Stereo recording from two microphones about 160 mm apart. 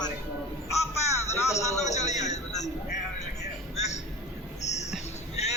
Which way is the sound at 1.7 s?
45° left (ahead or behind).